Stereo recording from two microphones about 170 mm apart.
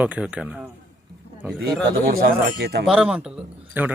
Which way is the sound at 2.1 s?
60° right (ahead or behind).